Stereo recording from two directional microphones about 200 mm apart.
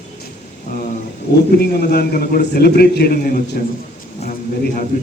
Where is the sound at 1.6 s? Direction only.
50° left (ahead or behind).